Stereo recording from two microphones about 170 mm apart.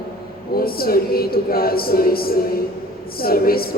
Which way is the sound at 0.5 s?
60° left (ahead or behind).